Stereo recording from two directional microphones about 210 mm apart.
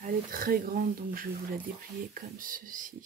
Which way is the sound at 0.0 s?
40° right (ahead or behind).